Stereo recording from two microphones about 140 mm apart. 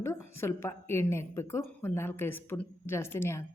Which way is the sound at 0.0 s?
20° left (ahead or behind).